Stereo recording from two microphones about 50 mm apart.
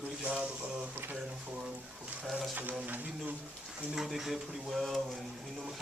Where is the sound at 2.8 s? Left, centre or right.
Right.